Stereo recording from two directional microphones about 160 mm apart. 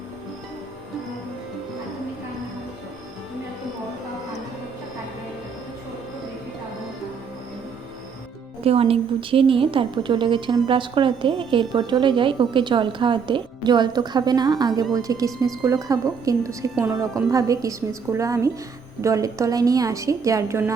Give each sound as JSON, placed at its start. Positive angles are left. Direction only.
{"t": 8.6, "sound": "a woman's voice", "side_deg": -40}